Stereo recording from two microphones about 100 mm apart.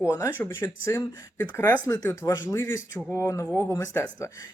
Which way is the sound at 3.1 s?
30° left (ahead or behind).